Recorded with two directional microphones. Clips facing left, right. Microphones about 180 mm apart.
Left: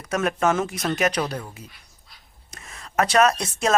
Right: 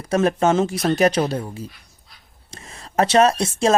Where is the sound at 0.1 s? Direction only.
30° right (ahead or behind).